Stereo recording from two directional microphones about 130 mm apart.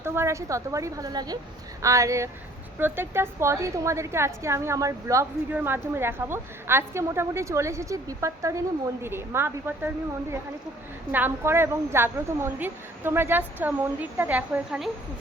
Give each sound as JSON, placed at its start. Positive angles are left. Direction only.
{"t": 0.0, "sound": "a woman's voice", "side_deg": -20}
{"t": 11.1, "sound": "a woman's voice", "side_deg": -15}